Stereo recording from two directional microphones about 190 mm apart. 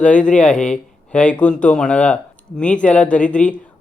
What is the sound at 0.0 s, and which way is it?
Speech, 5° left (ahead or behind).